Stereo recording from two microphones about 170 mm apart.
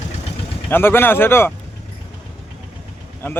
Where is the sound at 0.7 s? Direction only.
15° left (ahead or behind).